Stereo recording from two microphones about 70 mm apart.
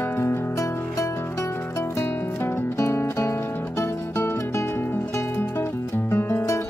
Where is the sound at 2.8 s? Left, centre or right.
Left.